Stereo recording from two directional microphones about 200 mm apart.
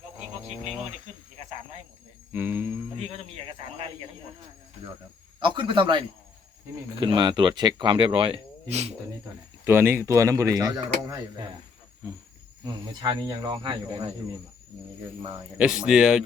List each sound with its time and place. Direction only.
2.3 s speech: 10° right (ahead or behind)
5.4 s a man's voice: 25° right (ahead or behind)
9.6 s speech: 10° right (ahead or behind)
12.6 s speech: 20° right (ahead or behind)
15.3 s speech: 5° right (ahead or behind)